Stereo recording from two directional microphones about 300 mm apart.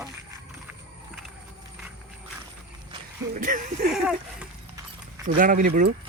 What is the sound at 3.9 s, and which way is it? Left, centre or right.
Speech, centre.